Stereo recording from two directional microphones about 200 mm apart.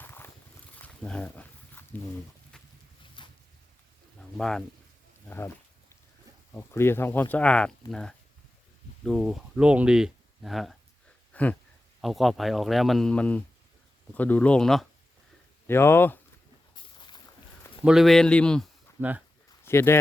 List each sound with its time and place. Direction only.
0.0 s a sound: 10° left (ahead or behind)
0.8 s wild animals: 5° left (ahead or behind)
3.2 s a sound: 25° left (ahead or behind)
4.4 s speech: 5° left (ahead or behind)
6.5 s speech: 10° left (ahead or behind)
11.3 s a sound: 5° left (ahead or behind)
12.0 s speech: centre (ahead or behind)
15.6 s speech: 10° left (ahead or behind)
17.8 s speech: centre (ahead or behind)
18.9 s speech: 10° right (ahead or behind)
19.6 s speech: 10° left (ahead or behind)